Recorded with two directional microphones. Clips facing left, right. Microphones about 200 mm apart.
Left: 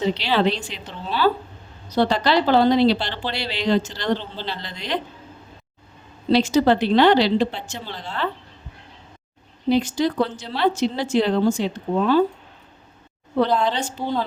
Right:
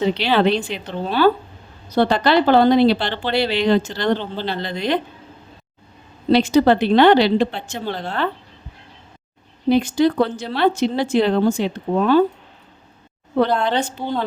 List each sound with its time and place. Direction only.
0.0 s speech: 60° right (ahead or behind)
6.3 s speech: 60° right (ahead or behind)
9.6 s speech: 55° right (ahead or behind)
13.4 s speech: 60° right (ahead or behind)
14.0 s a woman's voice: centre (ahead or behind)